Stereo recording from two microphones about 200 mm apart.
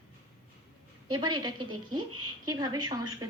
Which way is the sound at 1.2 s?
20° right (ahead or behind).